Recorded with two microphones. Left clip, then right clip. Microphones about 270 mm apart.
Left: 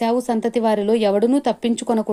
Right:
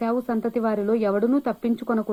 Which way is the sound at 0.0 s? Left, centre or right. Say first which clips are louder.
Left 5 dB; left.